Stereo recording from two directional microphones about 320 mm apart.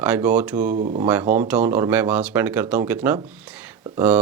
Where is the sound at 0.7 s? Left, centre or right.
Right.